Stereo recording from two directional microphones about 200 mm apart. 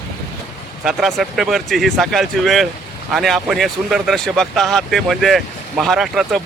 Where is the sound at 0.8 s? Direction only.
Centre (ahead or behind).